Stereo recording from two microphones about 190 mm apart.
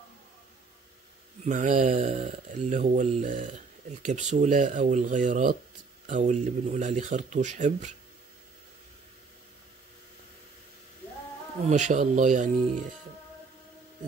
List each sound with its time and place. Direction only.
1.4 s speech: 40° right (ahead or behind)
11.6 s speech: 40° right (ahead or behind)